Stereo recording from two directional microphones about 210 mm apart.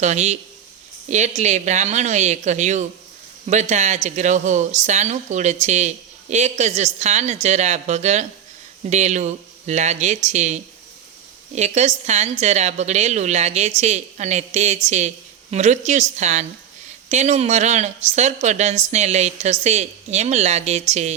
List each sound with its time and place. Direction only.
0.0 s speech: 35° right (ahead or behind)